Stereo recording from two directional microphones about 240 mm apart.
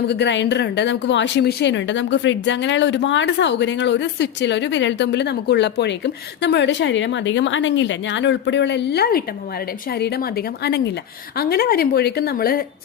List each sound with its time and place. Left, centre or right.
0.1 s a woman's voice: left